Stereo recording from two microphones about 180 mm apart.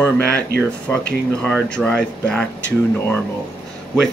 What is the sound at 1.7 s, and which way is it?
Speech, 5° left (ahead or behind).